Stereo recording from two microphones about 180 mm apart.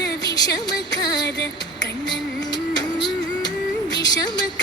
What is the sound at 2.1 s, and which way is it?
Music, 25° left (ahead or behind).